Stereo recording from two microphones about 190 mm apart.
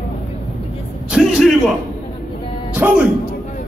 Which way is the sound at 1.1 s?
5° right (ahead or behind).